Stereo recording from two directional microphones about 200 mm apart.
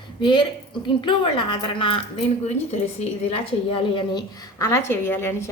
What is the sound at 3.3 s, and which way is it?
A woman's voice, 25° left (ahead or behind).